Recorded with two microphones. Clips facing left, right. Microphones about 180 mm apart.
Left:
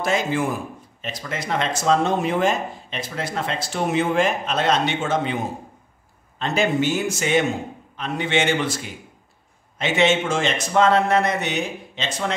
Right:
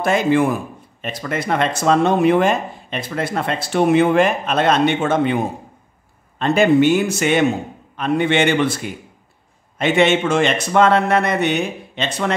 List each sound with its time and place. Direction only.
0.0 s speech: 60° right (ahead or behind)